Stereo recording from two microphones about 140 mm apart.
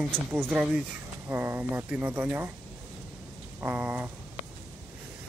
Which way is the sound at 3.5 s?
15° right (ahead or behind).